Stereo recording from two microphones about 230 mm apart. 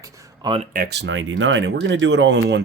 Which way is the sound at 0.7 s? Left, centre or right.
Right.